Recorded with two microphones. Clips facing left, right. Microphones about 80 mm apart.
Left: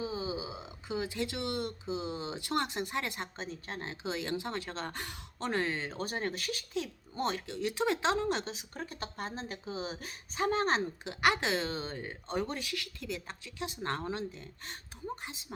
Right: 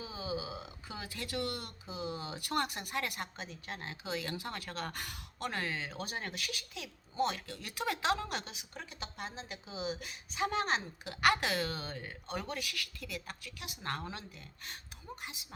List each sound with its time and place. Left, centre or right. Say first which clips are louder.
0.0 s speech: left 3 dB; left
11.0 s speech: right 2 dB; left